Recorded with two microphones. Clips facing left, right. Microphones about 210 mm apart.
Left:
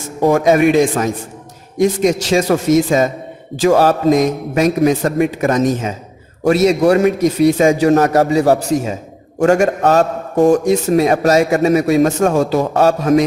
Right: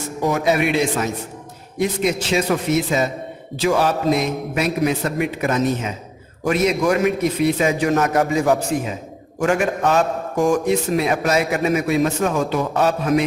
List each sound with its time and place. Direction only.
0.2 s a man's voice: 50° left (ahead or behind)